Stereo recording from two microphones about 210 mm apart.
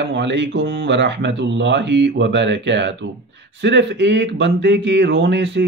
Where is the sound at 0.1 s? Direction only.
55° right (ahead or behind).